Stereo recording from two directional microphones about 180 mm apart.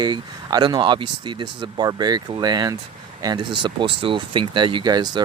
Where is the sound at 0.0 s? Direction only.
25° right (ahead or behind).